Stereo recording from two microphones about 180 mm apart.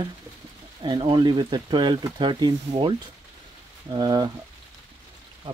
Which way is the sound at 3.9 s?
25° right (ahead or behind).